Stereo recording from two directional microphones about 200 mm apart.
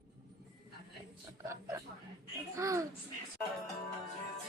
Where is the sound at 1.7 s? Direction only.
15° right (ahead or behind).